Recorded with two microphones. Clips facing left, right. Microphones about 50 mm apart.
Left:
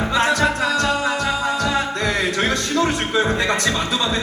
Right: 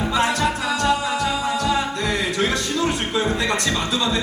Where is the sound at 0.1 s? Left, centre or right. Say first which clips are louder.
Left 3 dB; left.